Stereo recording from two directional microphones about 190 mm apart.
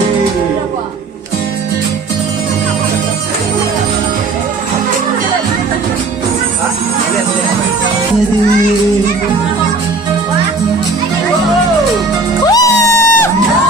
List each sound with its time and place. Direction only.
12.5 s music: 20° left (ahead or behind)